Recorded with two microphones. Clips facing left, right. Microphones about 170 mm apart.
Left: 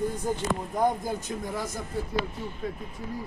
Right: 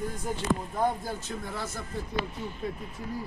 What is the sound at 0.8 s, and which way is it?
Speech, 15° left (ahead or behind).